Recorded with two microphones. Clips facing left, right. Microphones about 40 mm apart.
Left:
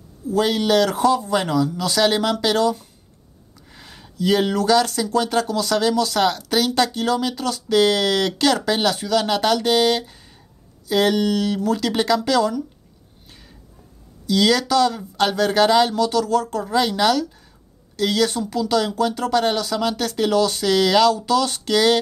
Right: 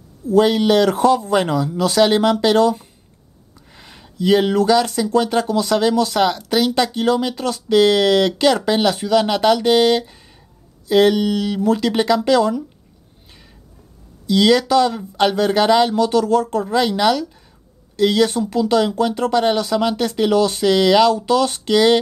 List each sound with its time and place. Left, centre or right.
0.4 s speech: right
3.5 s a sound: centre
4.0 s speech: centre
11.6 s speech: right
13.3 s a sound: centre
14.2 s speech: centre